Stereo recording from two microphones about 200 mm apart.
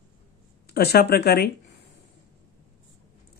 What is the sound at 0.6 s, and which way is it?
Speech, 50° left (ahead or behind).